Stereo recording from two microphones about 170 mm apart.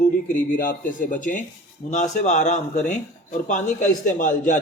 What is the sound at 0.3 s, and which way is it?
A man's voice, 55° left (ahead or behind).